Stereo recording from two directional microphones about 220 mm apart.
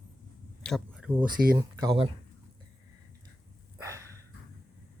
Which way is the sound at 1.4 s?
5° right (ahead or behind).